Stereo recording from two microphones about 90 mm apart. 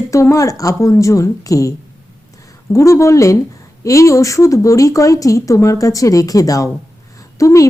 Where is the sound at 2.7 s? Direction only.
35° left (ahead or behind).